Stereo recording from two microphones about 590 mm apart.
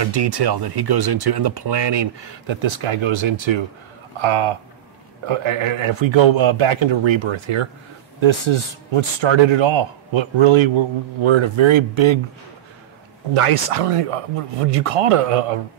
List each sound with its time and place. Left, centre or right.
0.0 s speech: right
13.3 s speech: right